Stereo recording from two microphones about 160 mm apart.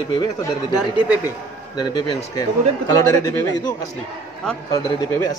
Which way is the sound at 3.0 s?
25° left (ahead or behind).